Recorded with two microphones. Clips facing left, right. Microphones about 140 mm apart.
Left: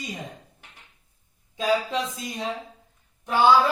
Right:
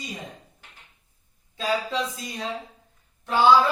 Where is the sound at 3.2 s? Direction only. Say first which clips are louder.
Even; 10° left (ahead or behind).